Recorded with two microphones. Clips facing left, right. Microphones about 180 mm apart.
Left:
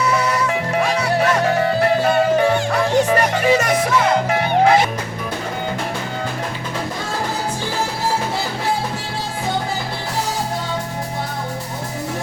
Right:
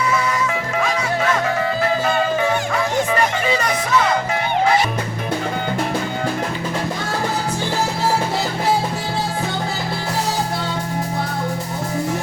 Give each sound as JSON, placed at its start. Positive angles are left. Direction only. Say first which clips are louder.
{"t": 3.1, "sound": "music", "louder": "left 3 dB", "side_deg": 45}